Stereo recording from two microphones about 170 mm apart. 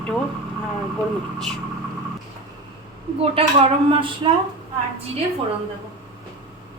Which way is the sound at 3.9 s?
30° right (ahead or behind).